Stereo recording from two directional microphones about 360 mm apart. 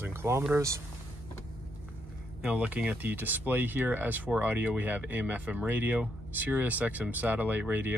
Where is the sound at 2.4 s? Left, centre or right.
Centre.